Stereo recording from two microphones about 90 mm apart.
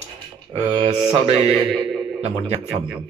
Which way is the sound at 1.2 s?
90° right.